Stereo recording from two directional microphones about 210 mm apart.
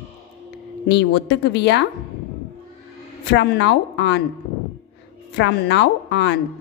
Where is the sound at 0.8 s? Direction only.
55° left (ahead or behind).